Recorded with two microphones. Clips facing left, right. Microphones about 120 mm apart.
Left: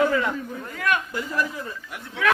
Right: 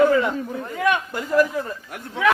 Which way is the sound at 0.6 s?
20° right (ahead or behind).